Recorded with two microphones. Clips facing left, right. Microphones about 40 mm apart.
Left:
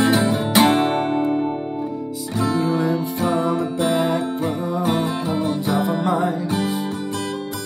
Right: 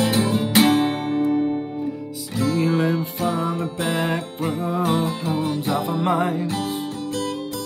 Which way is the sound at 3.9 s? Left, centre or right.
Right.